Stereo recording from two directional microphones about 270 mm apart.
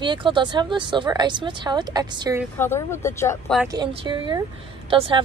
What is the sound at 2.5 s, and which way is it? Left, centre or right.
Speech, centre.